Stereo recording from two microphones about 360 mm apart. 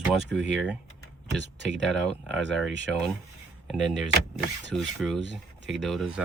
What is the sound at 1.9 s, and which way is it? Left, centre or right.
Speech, centre.